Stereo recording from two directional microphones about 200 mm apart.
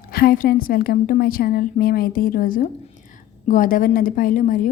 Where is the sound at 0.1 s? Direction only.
50° left (ahead or behind).